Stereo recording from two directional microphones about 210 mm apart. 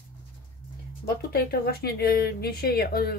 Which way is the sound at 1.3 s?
45° left (ahead or behind).